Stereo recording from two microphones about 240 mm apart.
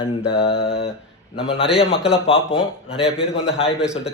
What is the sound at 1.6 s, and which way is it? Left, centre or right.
Speech, centre.